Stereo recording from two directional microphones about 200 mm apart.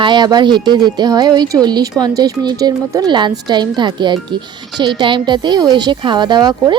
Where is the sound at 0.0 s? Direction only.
20° right (ahead or behind).